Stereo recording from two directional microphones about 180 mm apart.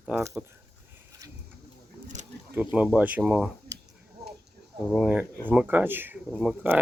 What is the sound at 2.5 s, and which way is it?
Speech, 10° right (ahead or behind).